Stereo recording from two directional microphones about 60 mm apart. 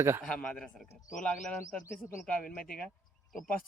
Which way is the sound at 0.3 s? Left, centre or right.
Centre.